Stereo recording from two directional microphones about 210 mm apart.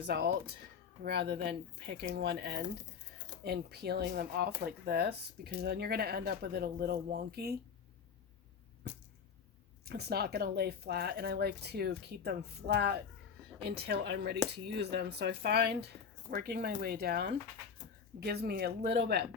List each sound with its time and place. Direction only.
0.1 s speech: 50° right (ahead or behind)
9.8 s speech: 50° right (ahead or behind)